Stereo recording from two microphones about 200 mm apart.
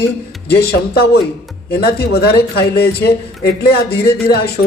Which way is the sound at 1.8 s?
50° left (ahead or behind).